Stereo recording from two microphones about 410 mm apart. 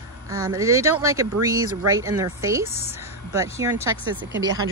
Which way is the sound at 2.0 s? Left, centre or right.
Centre.